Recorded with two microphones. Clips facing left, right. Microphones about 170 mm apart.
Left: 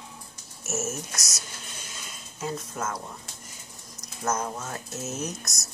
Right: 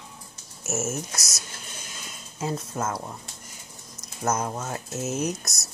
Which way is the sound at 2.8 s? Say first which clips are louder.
Right 4 dB; 30° right (ahead or behind).